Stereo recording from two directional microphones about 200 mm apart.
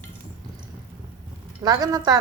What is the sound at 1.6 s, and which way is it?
Speech, 20° right (ahead or behind).